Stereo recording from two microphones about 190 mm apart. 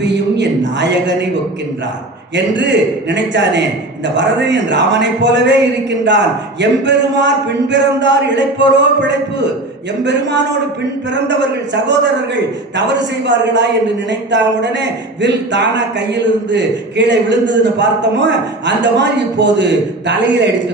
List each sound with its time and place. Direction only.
0.0 s a sound: 65° right (ahead or behind)
2.3 s a man's voice: 65° right (ahead or behind)
13.2 s a man's voice: 65° right (ahead or behind)